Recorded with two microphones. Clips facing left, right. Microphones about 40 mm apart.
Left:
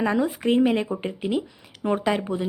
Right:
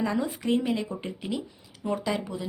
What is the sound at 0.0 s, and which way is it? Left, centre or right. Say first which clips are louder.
Speech: left 5 dB; left.